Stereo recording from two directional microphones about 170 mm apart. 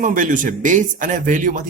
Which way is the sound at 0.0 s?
50° right (ahead or behind).